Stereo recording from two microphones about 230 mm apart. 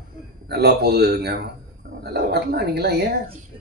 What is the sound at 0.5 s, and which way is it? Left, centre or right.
Speech, right.